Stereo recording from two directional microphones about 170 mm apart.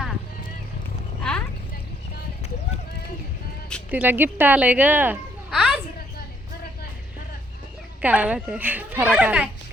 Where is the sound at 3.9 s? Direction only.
10° right (ahead or behind).